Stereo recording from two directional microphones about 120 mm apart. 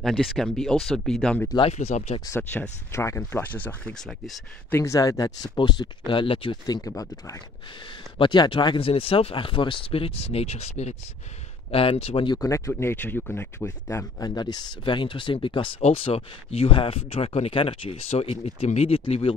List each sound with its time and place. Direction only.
0.0 s speech: centre (ahead or behind)
1.7 s speech: 65° left (ahead or behind)
2.9 s speech: 25° left (ahead or behind); by 6.6 s 50° left (ahead or behind)
6.6 s speech: 30° left (ahead or behind)
8.2 s speech: 45° left (ahead or behind); by 11.0 s 65° left (ahead or behind)
11.7 s speech: 50° left (ahead or behind)
12.3 s speech: 25° left (ahead or behind)
14.3 s speech: 35° left (ahead or behind); by 19.3 s 55° left (ahead or behind)